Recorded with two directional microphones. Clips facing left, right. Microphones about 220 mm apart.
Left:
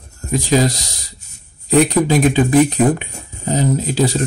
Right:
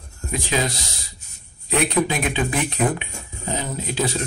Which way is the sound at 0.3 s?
40° left (ahead or behind).